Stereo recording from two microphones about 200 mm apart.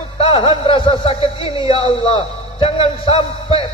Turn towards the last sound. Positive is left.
turn(degrees=25)  # may be behind; listen again after turning